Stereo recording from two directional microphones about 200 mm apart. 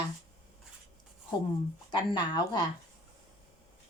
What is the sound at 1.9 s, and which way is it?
Speech, 20° left (ahead or behind).